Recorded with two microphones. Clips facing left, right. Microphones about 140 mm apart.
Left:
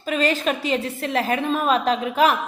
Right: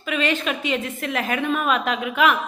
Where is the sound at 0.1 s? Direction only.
35° left (ahead or behind).